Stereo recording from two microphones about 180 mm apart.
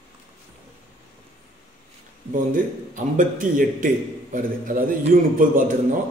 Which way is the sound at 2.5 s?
50° right (ahead or behind).